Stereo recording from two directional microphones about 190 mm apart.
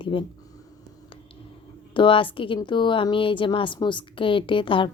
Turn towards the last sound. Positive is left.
turn(degrees=25)  # may be behind; listen again after turning